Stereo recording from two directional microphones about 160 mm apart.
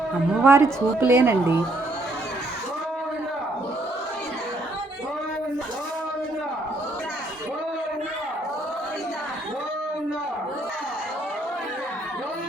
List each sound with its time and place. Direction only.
0.4 s a woman's voice: 15° right (ahead or behind)